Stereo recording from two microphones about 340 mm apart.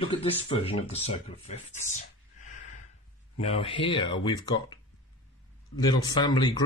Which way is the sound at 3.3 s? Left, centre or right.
Centre.